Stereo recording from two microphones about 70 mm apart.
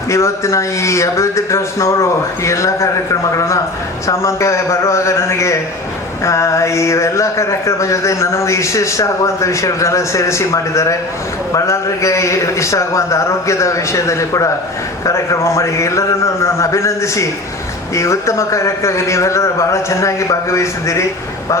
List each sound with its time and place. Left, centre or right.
0.1 s speech: left